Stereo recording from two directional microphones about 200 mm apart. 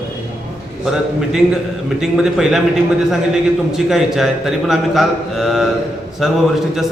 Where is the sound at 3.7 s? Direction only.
Centre (ahead or behind).